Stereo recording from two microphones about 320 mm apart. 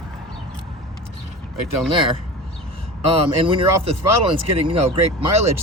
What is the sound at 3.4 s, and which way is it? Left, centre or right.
Speech, centre.